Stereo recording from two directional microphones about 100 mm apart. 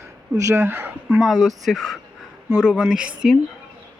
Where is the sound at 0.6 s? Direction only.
20° right (ahead or behind).